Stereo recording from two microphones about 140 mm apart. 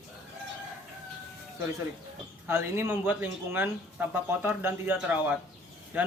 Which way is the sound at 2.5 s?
15° right (ahead or behind).